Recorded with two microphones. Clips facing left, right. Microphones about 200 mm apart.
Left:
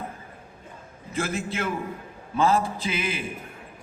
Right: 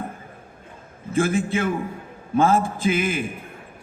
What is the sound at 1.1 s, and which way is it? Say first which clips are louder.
A man's voice: right 8 dB; 55° right (ahead or behind).